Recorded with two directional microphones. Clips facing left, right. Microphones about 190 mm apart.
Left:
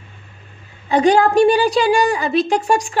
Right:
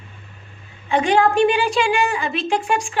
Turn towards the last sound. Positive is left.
turn(degrees=40)  # may be behind; listen again after turning